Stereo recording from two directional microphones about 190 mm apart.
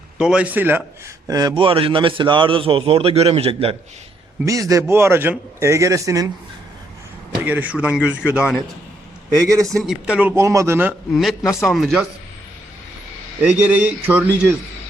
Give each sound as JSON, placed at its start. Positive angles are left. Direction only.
{"t": 0.2, "sound": "a man's voice", "side_deg": -5}
{"t": 1.3, "sound": "a man's voice", "side_deg": -20}
{"t": 4.4, "sound": "a man's voice", "side_deg": -15}
{"t": 7.4, "sound": "a man's voice", "side_deg": -10}
{"t": 9.5, "sound": "a man's voice", "side_deg": -15}
{"t": 9.7, "sound": "a man's voice", "side_deg": 0}
{"t": 11.1, "sound": "speech", "side_deg": 0}
{"t": 11.4, "sound": "speech", "side_deg": 15}
{"t": 11.7, "sound": "speech", "side_deg": 0}
{"t": 13.7, "sound": "a man's voice", "side_deg": -10}